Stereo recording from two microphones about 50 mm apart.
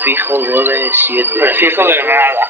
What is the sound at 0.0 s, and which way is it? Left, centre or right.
Speech, right.